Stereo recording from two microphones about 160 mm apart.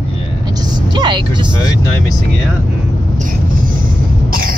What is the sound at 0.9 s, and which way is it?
Vehicle, 25° right (ahead or behind).